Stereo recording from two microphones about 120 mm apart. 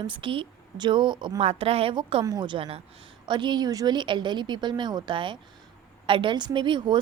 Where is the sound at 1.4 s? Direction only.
60° right (ahead or behind).